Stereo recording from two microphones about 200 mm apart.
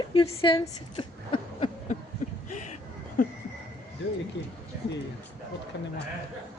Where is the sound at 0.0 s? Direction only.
25° left (ahead or behind).